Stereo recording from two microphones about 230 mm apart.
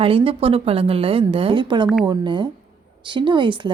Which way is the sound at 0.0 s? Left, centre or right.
Right.